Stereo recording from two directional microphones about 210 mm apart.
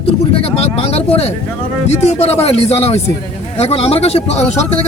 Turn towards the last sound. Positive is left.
turn(degrees=30)  # may be behind; listen again after turning